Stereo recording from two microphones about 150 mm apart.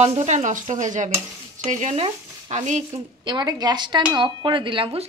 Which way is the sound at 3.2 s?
25° right (ahead or behind).